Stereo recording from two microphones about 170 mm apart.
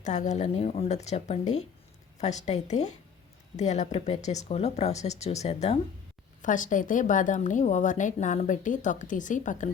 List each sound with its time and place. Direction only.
0.0 s speech: 45° left (ahead or behind)
6.4 s speech: 50° left (ahead or behind)